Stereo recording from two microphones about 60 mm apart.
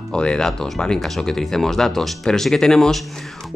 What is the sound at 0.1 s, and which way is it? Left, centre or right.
Speech, centre.